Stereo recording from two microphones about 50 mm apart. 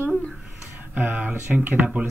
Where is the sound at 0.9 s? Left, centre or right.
Right.